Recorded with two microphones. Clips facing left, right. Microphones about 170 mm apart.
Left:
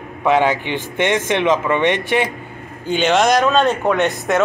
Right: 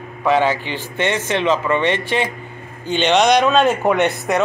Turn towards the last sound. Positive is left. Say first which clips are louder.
# right 1 dB
turn(degrees=-15)  # may be behind; listen again after turning